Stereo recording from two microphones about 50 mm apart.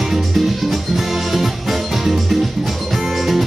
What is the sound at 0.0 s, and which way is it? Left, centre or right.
Music, centre.